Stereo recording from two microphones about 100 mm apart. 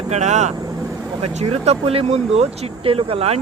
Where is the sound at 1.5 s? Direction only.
85° right.